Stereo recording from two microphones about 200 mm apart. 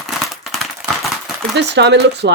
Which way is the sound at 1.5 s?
60° right (ahead or behind).